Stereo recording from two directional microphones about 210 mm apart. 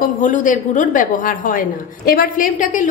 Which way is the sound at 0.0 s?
40° left (ahead or behind).